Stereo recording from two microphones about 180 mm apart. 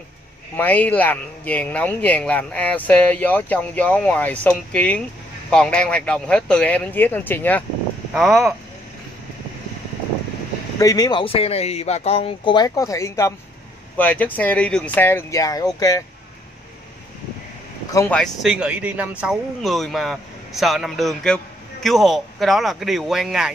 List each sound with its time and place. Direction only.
0.6 s speech: 10° left (ahead or behind)
8.1 s speech: centre (ahead or behind)
10.8 s speech: 20° left (ahead or behind)
17.9 s speech: 10° left (ahead or behind)